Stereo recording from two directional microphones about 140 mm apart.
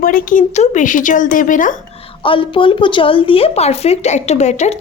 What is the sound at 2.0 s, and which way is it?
Speech, 40° left (ahead or behind).